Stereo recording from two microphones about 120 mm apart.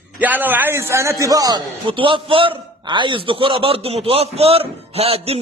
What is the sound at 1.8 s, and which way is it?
A man's voice, 45° right (ahead or behind).